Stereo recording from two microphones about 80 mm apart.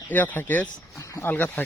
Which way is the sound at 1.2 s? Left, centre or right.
Left.